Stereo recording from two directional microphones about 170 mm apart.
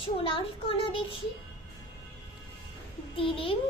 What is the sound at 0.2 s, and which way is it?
A child's voice, 30° left (ahead or behind).